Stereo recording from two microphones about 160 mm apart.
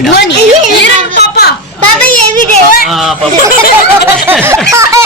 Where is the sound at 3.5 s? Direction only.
70° left (ahead or behind).